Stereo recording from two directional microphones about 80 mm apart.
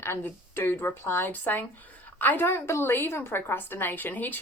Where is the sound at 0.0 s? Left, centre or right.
Left.